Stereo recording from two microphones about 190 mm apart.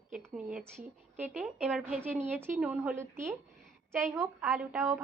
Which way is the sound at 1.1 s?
40° right (ahead or behind).